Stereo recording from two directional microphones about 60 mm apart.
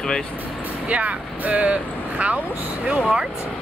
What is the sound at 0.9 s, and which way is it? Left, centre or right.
Speech, right.